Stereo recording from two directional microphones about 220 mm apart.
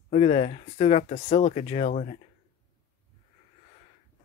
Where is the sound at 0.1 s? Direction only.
30° left (ahead or behind).